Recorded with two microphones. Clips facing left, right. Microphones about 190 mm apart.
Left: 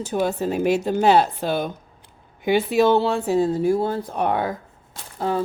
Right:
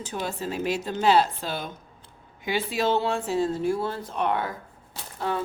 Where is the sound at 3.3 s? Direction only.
15° left (ahead or behind).